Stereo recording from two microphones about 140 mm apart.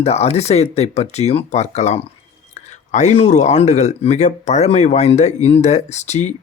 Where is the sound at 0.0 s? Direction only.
50° left (ahead or behind).